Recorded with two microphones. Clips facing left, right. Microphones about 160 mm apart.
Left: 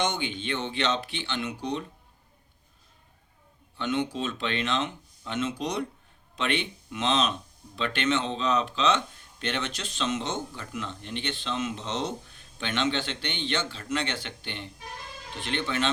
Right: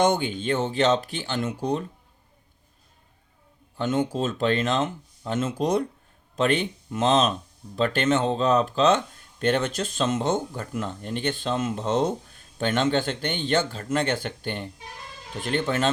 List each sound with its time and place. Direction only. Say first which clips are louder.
0.0 s speech: right 7 dB; 45° right (ahead or behind)
3.8 s speech: right 4 dB; 45° right (ahead or behind)